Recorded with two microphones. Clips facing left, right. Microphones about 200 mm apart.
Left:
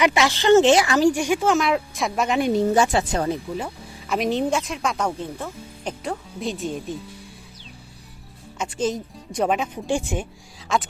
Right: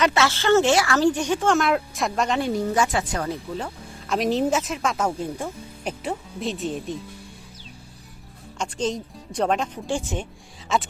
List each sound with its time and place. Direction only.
0.0 s speech: 15° left (ahead or behind)
2.4 s speech: 25° left (ahead or behind)
3.5 s speech: 5° left (ahead or behind)
8.5 s speech: 5° left (ahead or behind)
10.7 s speech: centre (ahead or behind)